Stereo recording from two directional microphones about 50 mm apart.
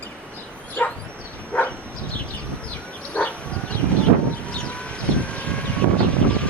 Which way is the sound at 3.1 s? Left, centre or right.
Left.